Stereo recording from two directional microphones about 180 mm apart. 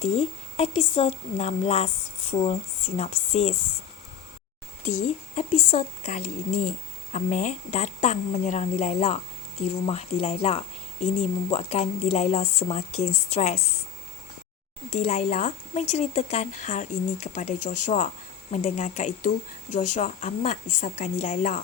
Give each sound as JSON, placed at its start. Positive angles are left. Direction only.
{"t": 0.0, "sound": "speech", "side_deg": 35}
{"t": 4.9, "sound": "speech", "side_deg": 45}
{"t": 14.8, "sound": "speech", "side_deg": 35}